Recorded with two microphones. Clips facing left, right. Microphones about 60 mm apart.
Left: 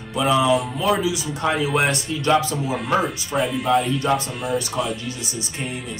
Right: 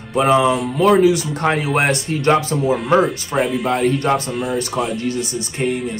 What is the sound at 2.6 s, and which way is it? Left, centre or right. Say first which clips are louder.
Speech: right 6 dB; centre.